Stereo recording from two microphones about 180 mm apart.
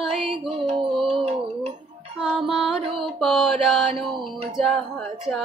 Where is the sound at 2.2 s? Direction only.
5° right (ahead or behind).